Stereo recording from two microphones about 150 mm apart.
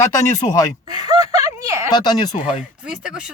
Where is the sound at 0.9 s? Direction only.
25° right (ahead or behind).